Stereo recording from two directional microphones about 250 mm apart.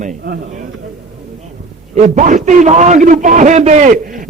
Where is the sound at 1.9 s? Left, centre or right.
Right.